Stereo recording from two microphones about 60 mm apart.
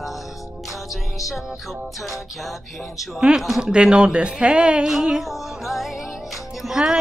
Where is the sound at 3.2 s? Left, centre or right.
Centre.